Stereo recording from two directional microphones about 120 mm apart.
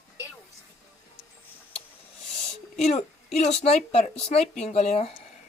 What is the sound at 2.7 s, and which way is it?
A woman's voice, 65° left (ahead or behind).